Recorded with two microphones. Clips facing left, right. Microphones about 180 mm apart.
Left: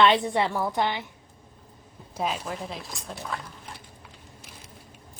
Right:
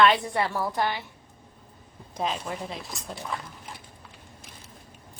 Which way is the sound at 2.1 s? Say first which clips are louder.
Even; 5° left (ahead or behind).